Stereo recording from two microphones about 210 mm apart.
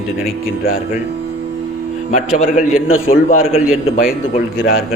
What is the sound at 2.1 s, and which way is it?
A man's voice, 35° left (ahead or behind).